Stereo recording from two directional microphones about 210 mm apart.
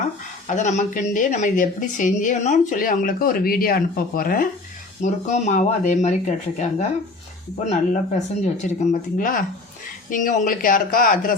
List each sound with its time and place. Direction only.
0.4 s speech: 35° left (ahead or behind)